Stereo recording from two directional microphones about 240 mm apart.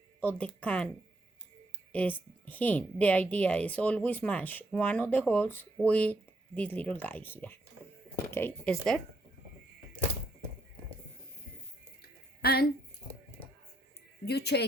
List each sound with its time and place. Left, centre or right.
0.2 s a woman's voice: centre
1.9 s a woman's voice: centre
12.0 s a sound: left
14.3 s speech: left